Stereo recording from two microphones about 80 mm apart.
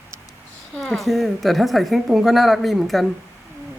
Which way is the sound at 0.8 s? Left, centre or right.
Centre.